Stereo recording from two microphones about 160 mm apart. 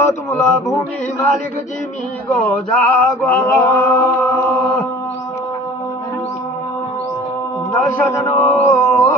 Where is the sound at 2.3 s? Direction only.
Centre (ahead or behind); by 4.0 s 20° left (ahead or behind).